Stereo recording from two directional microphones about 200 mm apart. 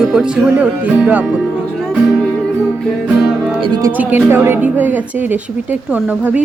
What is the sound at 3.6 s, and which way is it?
Speech, 20° right (ahead or behind).